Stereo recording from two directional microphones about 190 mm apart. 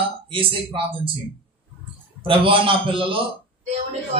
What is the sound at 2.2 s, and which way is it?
Speech, 25° right (ahead or behind).